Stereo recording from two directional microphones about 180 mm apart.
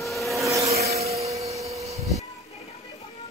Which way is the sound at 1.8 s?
35° right (ahead or behind).